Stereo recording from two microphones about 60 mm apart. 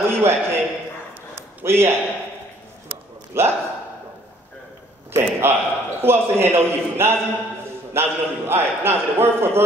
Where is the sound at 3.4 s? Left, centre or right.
Right.